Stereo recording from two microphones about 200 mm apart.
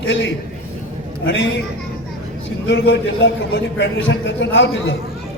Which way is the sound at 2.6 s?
65° left (ahead or behind).